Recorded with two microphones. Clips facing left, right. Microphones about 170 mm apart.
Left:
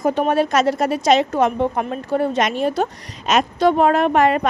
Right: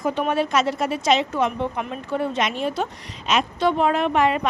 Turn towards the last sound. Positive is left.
turn(degrees=45)  # may be behind; listen again after turning